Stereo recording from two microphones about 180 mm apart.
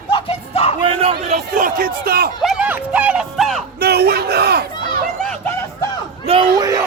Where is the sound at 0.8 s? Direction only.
35° right (ahead or behind); by 2.3 s 55° right (ahead or behind).